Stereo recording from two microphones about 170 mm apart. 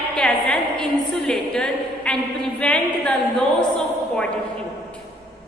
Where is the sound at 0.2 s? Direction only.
5° left (ahead or behind).